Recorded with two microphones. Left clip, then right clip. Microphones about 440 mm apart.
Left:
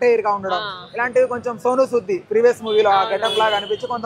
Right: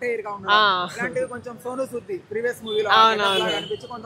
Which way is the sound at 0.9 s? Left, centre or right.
Centre.